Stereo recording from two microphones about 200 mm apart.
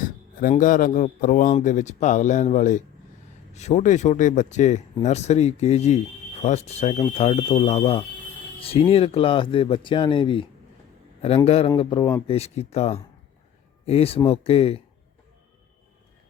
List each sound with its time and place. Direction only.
0.3 s a man's voice: 40° left (ahead or behind); by 12.2 s 20° left (ahead or behind)
12.3 s a man's voice: 30° left (ahead or behind)